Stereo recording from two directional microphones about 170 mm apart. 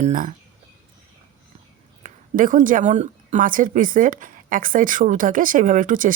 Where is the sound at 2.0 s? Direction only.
50° right (ahead or behind).